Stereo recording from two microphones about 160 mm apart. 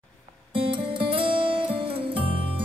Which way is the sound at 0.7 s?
35° right (ahead or behind).